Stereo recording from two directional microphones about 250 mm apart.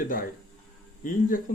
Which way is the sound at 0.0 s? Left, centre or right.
Left.